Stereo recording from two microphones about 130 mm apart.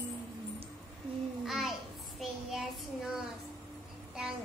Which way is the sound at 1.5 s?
Centre (ahead or behind).